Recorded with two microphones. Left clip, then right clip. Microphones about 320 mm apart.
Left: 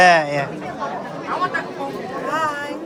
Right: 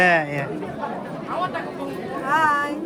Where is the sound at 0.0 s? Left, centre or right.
Centre.